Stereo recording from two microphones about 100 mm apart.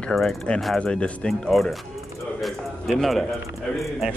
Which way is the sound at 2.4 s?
Centre (ahead or behind).